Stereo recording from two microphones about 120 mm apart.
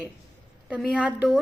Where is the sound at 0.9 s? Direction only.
10° right (ahead or behind).